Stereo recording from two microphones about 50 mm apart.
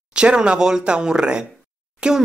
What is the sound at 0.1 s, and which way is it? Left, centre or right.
Speech, centre.